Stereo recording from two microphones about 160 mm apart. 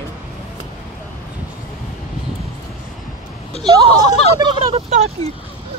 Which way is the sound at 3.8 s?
40° left (ahead or behind).